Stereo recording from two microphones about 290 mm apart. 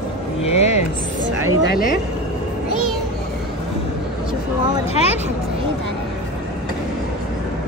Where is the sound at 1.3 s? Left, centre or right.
Left.